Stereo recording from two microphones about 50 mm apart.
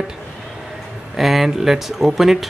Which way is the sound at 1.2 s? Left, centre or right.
Centre.